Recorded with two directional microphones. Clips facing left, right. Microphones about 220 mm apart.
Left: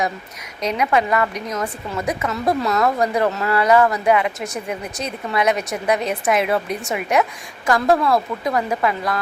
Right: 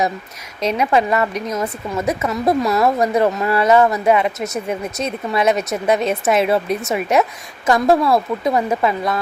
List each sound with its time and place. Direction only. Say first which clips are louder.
0.6 s speech: right 2 dB; 25° right (ahead or behind)